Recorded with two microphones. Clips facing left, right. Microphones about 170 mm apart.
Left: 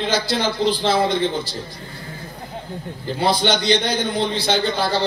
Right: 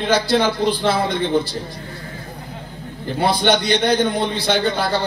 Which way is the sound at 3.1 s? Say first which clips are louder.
Right 2 dB; 55° right (ahead or behind).